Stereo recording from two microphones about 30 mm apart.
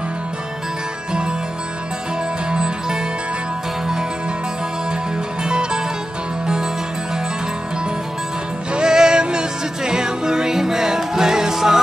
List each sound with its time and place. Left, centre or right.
2.5 s music: right
5.4 s music: right
8.8 s music: right